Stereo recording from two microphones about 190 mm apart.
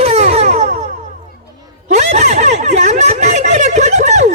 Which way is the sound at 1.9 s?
35° right (ahead or behind).